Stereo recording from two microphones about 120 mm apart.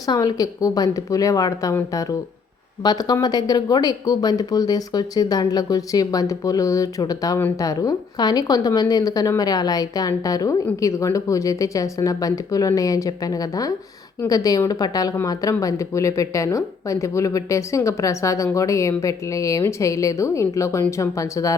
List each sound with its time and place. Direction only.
0.1 s speech: 35° left (ahead or behind)
2.8 s speech: 35° left (ahead or behind)